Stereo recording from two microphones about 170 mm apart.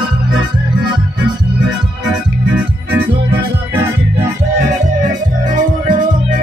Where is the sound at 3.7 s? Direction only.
15° right (ahead or behind).